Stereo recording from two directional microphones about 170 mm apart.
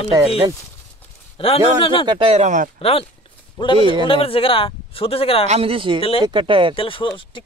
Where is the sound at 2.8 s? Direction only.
35° left (ahead or behind).